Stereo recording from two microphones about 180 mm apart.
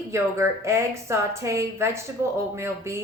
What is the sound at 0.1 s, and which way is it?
Speech, 15° right (ahead or behind).